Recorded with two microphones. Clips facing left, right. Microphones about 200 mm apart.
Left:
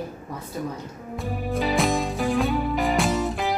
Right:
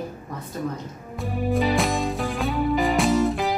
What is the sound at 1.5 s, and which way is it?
Music, centre (ahead or behind).